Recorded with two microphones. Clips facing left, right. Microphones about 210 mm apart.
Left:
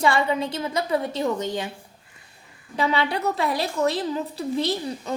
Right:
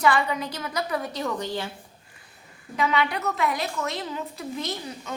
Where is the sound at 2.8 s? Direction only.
30° left (ahead or behind).